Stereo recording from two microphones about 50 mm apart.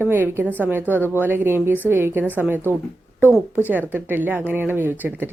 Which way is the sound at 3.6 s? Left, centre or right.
Right.